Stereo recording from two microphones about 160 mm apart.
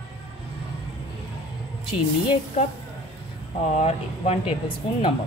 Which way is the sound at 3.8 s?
40° left (ahead or behind).